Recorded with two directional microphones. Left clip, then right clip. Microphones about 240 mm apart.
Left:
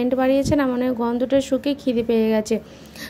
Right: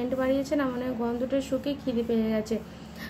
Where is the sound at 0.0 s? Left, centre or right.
Left.